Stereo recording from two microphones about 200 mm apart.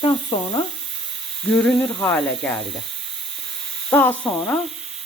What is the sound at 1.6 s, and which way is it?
Snake, 5° left (ahead or behind).